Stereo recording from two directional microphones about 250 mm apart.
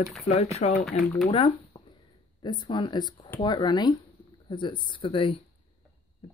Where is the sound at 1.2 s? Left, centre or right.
Left.